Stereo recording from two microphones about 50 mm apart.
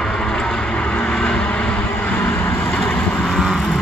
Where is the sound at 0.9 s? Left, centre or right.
Left.